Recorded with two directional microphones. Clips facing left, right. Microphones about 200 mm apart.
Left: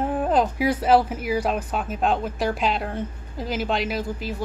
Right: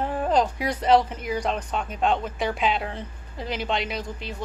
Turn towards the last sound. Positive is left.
turn(degrees=5)  # may be behind; listen again after turning